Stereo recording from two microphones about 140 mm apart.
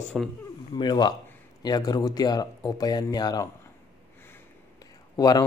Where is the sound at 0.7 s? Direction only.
30° left (ahead or behind).